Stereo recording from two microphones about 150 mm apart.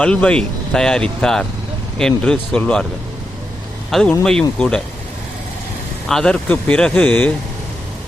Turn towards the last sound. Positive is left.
turn(degrees=10)  # may be behind; listen again after turning